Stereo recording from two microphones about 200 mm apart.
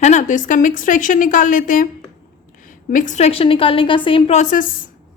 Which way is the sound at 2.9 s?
40° left (ahead or behind).